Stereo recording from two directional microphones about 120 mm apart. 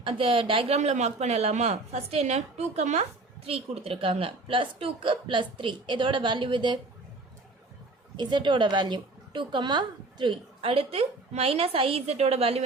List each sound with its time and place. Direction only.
0.0 s a woman's voice: 45° right (ahead or behind)
0.8 s a woman's voice: 70° right (ahead or behind); by 6.7 s 40° right (ahead or behind)
8.1 s a woman's voice: 40° right (ahead or behind); by 12.6 s 55° right (ahead or behind)